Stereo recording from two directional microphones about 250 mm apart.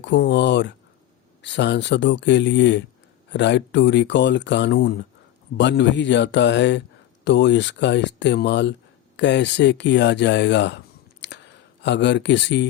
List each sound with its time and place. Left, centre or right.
0.0 s speech: left